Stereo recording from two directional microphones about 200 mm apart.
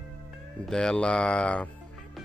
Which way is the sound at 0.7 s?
5° left (ahead or behind).